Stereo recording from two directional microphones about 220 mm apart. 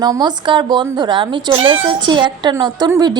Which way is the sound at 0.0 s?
20° right (ahead or behind).